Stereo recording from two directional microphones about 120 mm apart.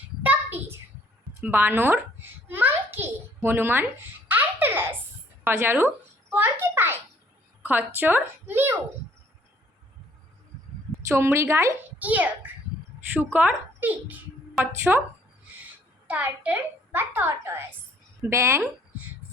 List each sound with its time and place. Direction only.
0.2 s a sound: 15° right (ahead or behind)
1.4 s a woman's voice: 15° right (ahead or behind)
2.5 s babbling: 15° right (ahead or behind)
4.3 s baby laughter: 15° right (ahead or behind)
5.4 s a woman's voice: 20° right (ahead or behind)
6.3 s a sound: 15° right (ahead or behind)
7.6 s a woman's voice: 15° right (ahead or behind)
11.1 s a child's voice: 20° right (ahead or behind)
16.0 s a woman's voice: 15° right (ahead or behind)